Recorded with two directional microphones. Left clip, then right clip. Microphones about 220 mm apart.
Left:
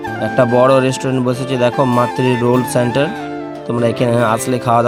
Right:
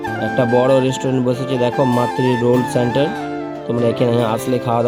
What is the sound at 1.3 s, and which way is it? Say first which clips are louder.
Speech: left 1 dB; 70° left (ahead or behind).